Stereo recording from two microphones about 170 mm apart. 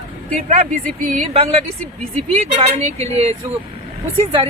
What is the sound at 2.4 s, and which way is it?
Speech, 35° right (ahead or behind).